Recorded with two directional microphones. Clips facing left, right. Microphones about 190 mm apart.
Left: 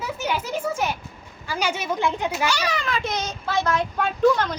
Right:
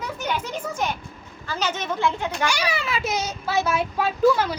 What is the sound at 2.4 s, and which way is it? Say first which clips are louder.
A child's voice: right 2 dB; 10° right (ahead or behind).